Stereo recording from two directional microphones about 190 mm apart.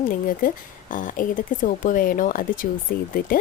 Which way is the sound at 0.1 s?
45° left (ahead or behind).